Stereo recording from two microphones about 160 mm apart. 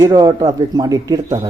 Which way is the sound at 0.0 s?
20° right (ahead or behind).